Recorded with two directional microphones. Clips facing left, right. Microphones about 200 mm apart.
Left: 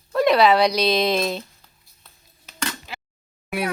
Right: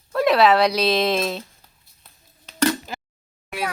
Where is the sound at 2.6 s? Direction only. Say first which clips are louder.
Right 11 dB; 45° right (ahead or behind).